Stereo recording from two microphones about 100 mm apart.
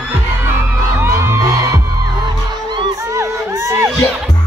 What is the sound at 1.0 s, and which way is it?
Music, 25° right (ahead or behind).